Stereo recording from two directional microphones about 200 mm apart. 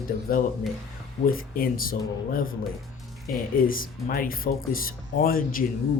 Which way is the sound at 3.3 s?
45° left (ahead or behind).